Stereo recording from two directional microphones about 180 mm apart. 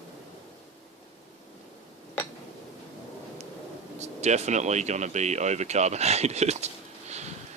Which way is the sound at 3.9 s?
40° right (ahead or behind).